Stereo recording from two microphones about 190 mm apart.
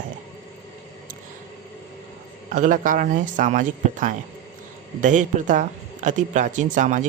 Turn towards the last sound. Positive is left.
turn(degrees=-40)  # may be behind; listen again after turning